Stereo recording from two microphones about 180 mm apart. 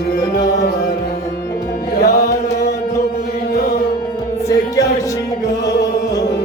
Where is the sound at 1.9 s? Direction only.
65° left (ahead or behind).